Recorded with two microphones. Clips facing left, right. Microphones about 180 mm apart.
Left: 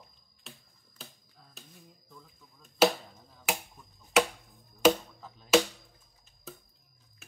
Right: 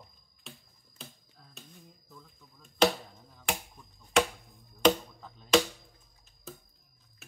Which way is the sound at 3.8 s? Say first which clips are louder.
Left 1 dB; centre (ahead or behind).